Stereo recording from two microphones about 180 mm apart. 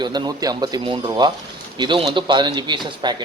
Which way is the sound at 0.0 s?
25° right (ahead or behind).